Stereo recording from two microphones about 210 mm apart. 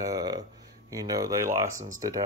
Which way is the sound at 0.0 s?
15° right (ahead or behind).